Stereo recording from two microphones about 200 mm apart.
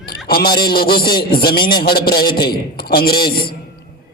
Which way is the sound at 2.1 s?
50° left (ahead or behind).